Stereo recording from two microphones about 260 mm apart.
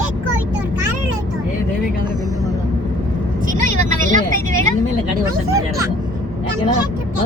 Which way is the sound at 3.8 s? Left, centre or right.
Right.